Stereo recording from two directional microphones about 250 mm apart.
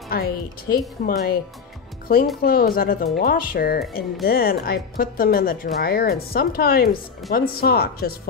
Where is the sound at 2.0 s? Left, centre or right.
Left.